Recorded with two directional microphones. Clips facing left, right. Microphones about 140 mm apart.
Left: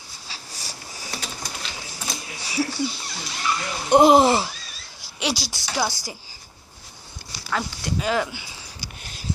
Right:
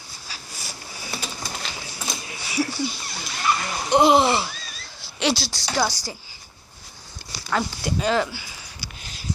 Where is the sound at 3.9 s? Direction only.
45° left (ahead or behind).